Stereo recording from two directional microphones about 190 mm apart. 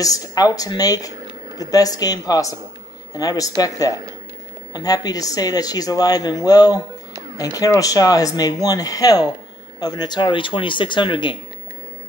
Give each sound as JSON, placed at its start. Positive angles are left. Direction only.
{"t": 0.0, "sound": "speech", "side_deg": 20}